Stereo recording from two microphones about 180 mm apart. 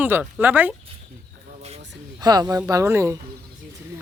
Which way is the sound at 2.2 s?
20° right (ahead or behind).